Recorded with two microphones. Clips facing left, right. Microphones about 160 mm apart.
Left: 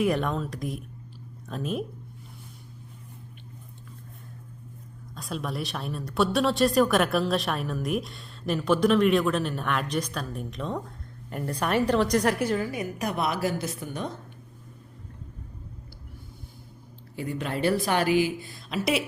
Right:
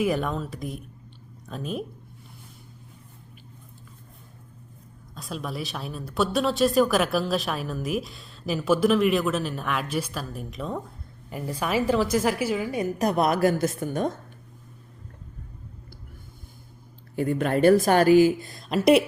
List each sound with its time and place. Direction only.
0.0 s a woman's voice: centre (ahead or behind)
5.1 s a woman's voice: centre (ahead or behind)
12.7 s a woman's voice: 30° right (ahead or behind)
17.2 s a woman's voice: 50° right (ahead or behind)